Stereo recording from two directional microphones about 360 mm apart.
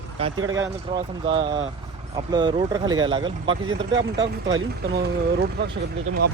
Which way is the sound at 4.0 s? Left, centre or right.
Right.